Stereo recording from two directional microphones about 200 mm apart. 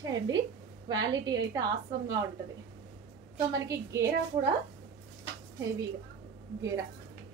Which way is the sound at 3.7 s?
15° right (ahead or behind).